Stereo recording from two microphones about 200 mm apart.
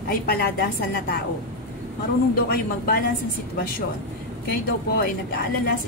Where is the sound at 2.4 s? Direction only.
50° left (ahead or behind).